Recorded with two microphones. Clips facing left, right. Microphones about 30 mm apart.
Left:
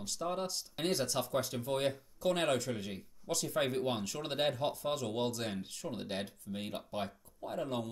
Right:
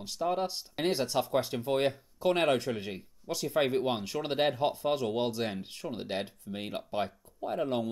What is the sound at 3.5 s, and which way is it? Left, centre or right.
Speech, right.